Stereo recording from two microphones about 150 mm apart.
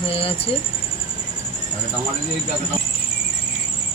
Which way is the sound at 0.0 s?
40° left (ahead or behind).